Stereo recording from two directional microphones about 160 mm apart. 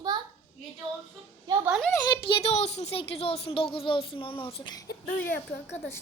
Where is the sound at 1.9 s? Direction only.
25° left (ahead or behind).